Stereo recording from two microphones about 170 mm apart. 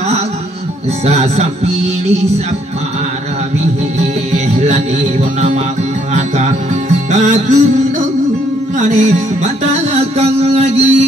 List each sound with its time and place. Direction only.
1.0 s a man's voice: 40° right (ahead or behind)
4.3 s music: 45° right (ahead or behind)
6.1 s music: 40° right (ahead or behind)
8.7 s music: 45° right (ahead or behind)